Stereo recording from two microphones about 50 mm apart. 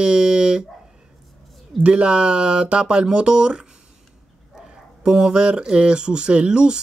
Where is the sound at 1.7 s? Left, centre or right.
Right.